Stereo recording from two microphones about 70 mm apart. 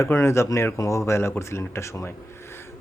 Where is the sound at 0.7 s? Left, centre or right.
Left.